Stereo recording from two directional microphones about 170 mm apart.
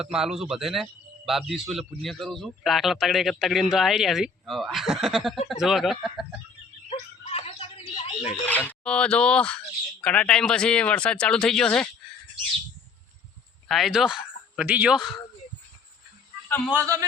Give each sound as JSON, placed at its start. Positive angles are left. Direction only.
{"t": 0.0, "sound": "a man's voice", "side_deg": -5}
{"t": 7.3, "sound": "a sound", "side_deg": 35}
{"t": 8.4, "sound": "a man's voice", "side_deg": 10}
{"t": 13.7, "sound": "speech", "side_deg": 0}
{"t": 16.5, "sound": "a man's voice", "side_deg": 10}
{"t": 16.7, "sound": "a man's voice", "side_deg": -20}